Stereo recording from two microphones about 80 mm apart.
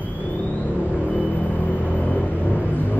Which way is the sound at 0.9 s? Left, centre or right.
Centre.